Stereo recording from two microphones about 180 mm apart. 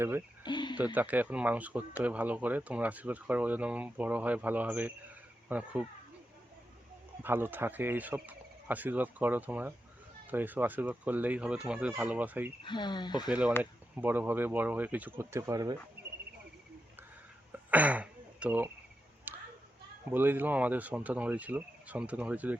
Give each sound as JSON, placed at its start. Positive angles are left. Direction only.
{"t": 0.4, "sound": "cricket", "side_deg": 25}
{"t": 0.9, "sound": "speech", "side_deg": -10}
{"t": 7.2, "sound": "speech", "side_deg": -10}
{"t": 12.6, "sound": "speech", "side_deg": 25}
{"t": 13.6, "sound": "speech", "side_deg": -10}
{"t": 17.5, "sound": "throat clearing", "side_deg": -10}
{"t": 19.3, "sound": "a sound", "side_deg": -10}
{"t": 20.1, "sound": "speech", "side_deg": -10}